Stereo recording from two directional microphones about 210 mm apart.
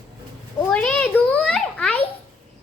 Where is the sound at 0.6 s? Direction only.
5° left (ahead or behind).